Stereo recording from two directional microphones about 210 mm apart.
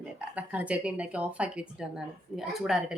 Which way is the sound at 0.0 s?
5° right (ahead or behind).